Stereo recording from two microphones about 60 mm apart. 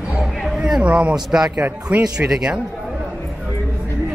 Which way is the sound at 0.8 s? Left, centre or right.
Centre.